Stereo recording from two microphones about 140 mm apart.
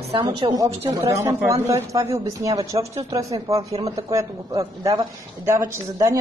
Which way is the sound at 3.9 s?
20° right (ahead or behind).